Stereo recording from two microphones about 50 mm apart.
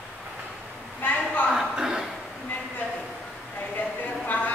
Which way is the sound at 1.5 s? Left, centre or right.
Centre.